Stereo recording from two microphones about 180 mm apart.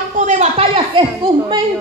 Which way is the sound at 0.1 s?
40° right (ahead or behind).